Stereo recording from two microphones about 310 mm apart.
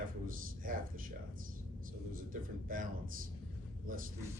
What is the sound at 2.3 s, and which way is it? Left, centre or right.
Speech, right.